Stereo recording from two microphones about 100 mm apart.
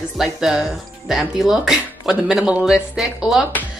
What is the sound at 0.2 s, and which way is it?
Speech, 5° right (ahead or behind).